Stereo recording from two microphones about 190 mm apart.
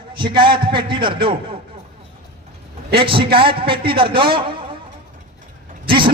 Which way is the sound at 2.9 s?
25° right (ahead or behind).